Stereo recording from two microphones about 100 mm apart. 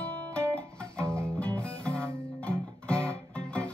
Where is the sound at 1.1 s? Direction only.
25° right (ahead or behind).